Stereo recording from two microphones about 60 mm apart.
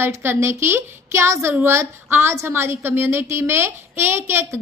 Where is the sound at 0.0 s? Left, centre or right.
Right.